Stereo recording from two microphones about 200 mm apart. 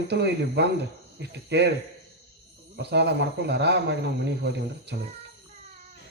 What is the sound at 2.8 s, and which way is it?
Speech, 55° right (ahead or behind).